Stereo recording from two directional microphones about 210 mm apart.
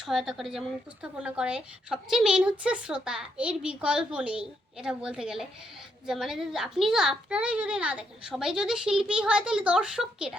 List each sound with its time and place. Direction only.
0.0 s a woman's voice: centre (ahead or behind)